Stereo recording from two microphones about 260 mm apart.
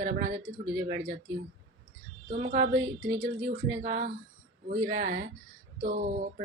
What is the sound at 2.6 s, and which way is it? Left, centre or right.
Speech, right.